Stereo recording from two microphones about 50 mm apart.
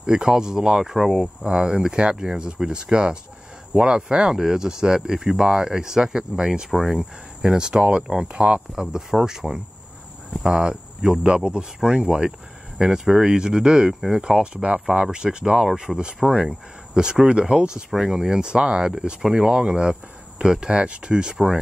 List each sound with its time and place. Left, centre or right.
0.0 s speech: centre
1.2 s speech: centre